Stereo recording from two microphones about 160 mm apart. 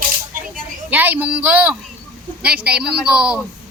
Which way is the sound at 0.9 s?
10° right (ahead or behind).